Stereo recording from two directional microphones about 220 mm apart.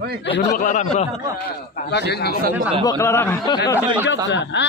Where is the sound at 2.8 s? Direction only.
15° left (ahead or behind).